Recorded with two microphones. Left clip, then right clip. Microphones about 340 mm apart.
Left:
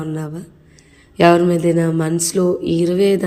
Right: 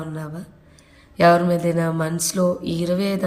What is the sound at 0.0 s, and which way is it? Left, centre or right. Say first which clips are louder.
Speech: left 6 dB; centre.